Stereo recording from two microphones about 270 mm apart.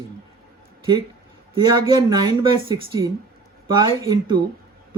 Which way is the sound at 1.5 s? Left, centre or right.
Centre.